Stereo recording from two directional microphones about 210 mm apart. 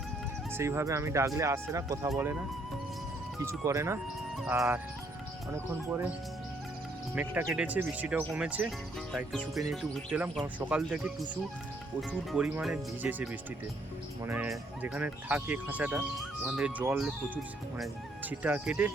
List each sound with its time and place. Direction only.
0.5 s speech: 10° right (ahead or behind)
3.4 s speech: 15° right (ahead or behind)
7.2 s speech: 5° right (ahead or behind)
14.3 s speech: 10° right (ahead or behind)